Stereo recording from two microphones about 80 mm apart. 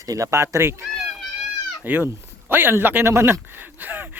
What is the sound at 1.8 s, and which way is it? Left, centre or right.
Speech, right.